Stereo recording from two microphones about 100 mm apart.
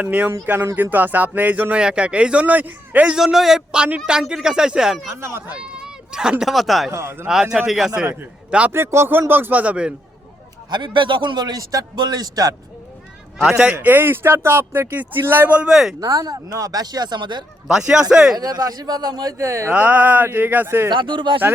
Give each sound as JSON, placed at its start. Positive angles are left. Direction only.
{"t": 0.0, "sound": "speech", "side_deg": -15}
{"t": 5.1, "sound": "speech", "side_deg": -25}
{"t": 5.5, "sound": "speech", "side_deg": -10}
{"t": 6.9, "sound": "speech", "side_deg": -25}
{"t": 7.3, "sound": "a man's voice", "side_deg": -5}
{"t": 8.7, "sound": "speech", "side_deg": -25}
{"t": 10.7, "sound": "a man's voice", "side_deg": -50}
{"t": 13.4, "sound": "speech", "side_deg": -5}
{"t": 13.7, "sound": "speech", "side_deg": -20}
{"t": 16.0, "sound": "speech", "side_deg": -40}
{"t": 17.7, "sound": "speech", "side_deg": -10}
{"t": 18.3, "sound": "speech", "side_deg": -40}
{"t": 19.7, "sound": "speech", "side_deg": -15}
{"t": 20.9, "sound": "speech", "side_deg": -55}